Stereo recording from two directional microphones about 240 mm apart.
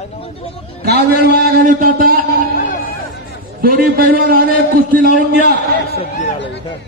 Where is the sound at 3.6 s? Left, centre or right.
Right.